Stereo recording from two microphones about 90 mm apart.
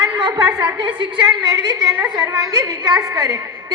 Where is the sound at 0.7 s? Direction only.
60° right (ahead or behind).